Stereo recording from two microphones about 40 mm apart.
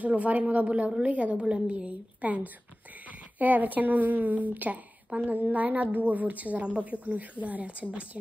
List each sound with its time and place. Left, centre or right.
0.0 s a woman's voice: right